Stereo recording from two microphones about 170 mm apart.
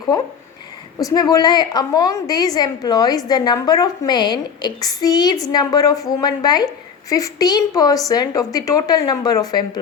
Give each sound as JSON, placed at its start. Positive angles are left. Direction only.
{"t": 0.9, "sound": "a woman's voice", "side_deg": 25}